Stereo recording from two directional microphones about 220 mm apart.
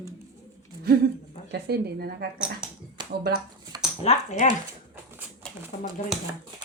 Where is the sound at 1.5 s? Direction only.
45° right (ahead or behind).